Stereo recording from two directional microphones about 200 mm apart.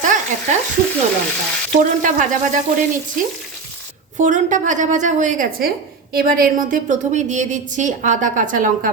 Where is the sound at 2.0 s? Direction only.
40° right (ahead or behind).